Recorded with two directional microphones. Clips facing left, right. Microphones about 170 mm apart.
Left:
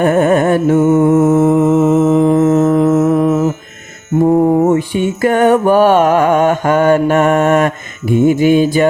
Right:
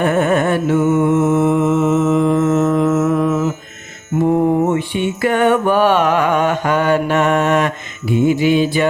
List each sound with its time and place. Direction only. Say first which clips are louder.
0.0 s music: left 4 dB; 40° left (ahead or behind)
4.7 s music: left 4 dB; 40° left (ahead or behind)